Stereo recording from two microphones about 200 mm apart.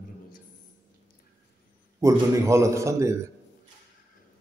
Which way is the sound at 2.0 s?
15° right (ahead or behind).